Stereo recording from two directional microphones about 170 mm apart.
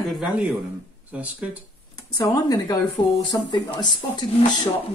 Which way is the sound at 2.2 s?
20° left (ahead or behind).